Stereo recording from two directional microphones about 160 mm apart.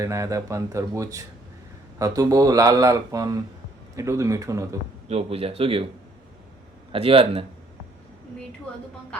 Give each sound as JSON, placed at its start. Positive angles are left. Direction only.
{"t": 0.0, "sound": "speech", "side_deg": -20}
{"t": 5.0, "sound": "speech", "side_deg": -40}
{"t": 6.9, "sound": "speech", "side_deg": -35}